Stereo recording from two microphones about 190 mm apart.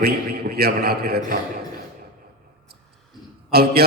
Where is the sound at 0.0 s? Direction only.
55° right (ahead or behind).